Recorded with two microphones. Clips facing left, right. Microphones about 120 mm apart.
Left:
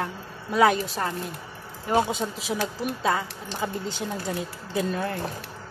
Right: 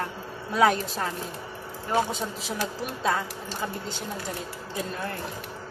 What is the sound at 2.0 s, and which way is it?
Speech, 15° left (ahead or behind).